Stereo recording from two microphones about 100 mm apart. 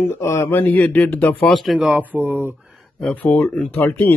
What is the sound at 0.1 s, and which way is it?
Speech, 30° left (ahead or behind).